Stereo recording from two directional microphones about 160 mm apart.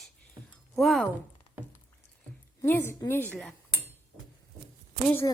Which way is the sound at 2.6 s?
15° left (ahead or behind).